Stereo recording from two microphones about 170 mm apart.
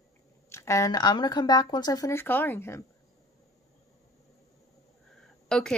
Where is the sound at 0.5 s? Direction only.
15° left (ahead or behind).